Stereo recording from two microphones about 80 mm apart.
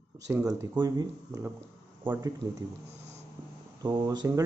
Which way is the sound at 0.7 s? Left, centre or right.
Right.